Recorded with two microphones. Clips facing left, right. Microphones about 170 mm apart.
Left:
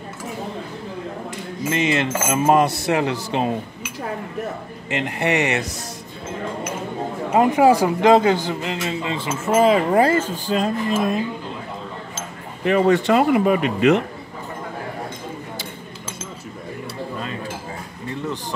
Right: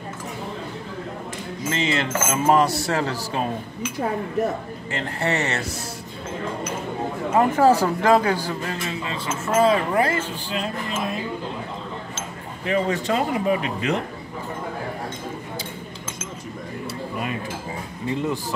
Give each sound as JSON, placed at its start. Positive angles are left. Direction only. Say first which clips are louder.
{"t": 1.7, "sound": "a man's voice", "louder": "left 3 dB", "side_deg": 20}
{"t": 4.8, "sound": "a man's voice", "louder": "left 4 dB", "side_deg": 15}
{"t": 7.2, "sound": "a man's voice", "louder": "left 2 dB", "side_deg": 15}
{"t": 10.3, "sound": "speech", "louder": "left 6 dB", "side_deg": 45}
{"t": 12.6, "sound": "speech", "louder": "left 6 dB", "side_deg": 65}